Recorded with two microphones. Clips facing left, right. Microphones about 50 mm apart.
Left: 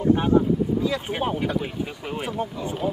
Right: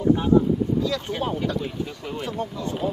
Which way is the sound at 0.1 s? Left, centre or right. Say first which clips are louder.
Right 1 dB; left.